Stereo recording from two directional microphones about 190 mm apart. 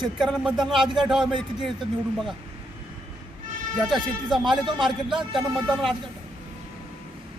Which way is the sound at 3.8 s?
Centre (ahead or behind).